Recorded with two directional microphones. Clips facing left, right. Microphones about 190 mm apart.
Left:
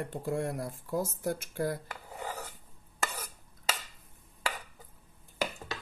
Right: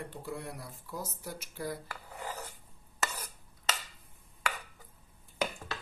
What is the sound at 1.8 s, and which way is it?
Dishes, 15° left (ahead or behind).